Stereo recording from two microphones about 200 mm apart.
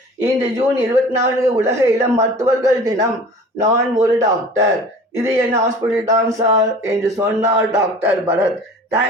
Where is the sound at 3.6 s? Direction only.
35° right (ahead or behind).